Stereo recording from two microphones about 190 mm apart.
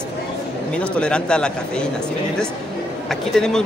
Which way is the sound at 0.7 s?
5° left (ahead or behind).